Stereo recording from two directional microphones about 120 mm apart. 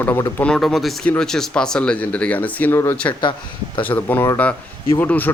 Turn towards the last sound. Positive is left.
turn(degrees=15)  # may be behind; listen again after turning